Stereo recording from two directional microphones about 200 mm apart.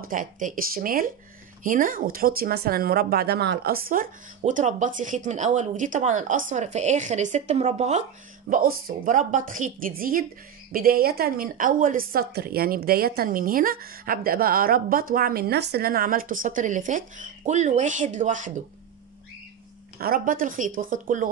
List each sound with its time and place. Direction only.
0.1 s a woman's voice: 40° right (ahead or behind)
8.5 s a woman's voice: 45° right (ahead or behind)
20.0 s a woman's voice: 45° right (ahead or behind)